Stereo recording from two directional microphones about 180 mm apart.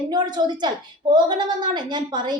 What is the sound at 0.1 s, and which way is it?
A woman's voice, 25° right (ahead or behind).